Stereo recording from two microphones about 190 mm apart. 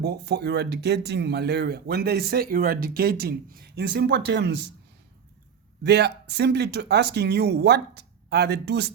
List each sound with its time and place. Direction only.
0.0 s speech: 60° right (ahead or behind)
5.8 s speech: 60° right (ahead or behind)